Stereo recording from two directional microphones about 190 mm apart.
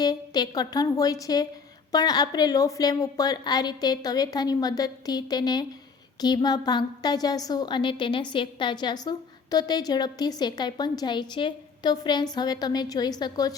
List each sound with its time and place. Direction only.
0.0 s a woman's voice: 20° left (ahead or behind)